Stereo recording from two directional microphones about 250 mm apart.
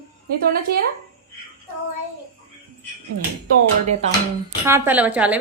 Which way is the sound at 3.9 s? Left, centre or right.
Right.